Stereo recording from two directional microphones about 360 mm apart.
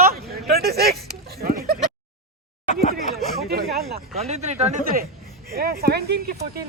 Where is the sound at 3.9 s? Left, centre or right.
Centre.